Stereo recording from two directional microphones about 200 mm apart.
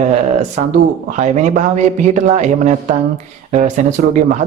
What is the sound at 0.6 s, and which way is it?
A man's voice, 35° right (ahead or behind).